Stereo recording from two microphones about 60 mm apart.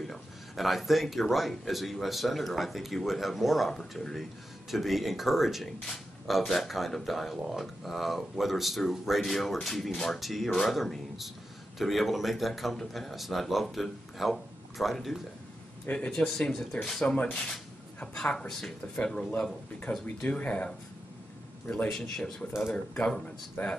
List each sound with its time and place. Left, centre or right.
0.1 s speech: centre
15.9 s speech: left
16.4 s speech: centre
21.8 s speech: centre
23.6 s speech: left